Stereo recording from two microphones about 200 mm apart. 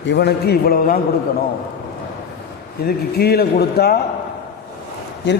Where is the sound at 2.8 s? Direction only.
50° left (ahead or behind).